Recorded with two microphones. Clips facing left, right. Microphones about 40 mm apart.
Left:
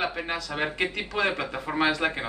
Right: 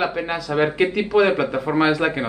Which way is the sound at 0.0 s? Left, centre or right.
Centre.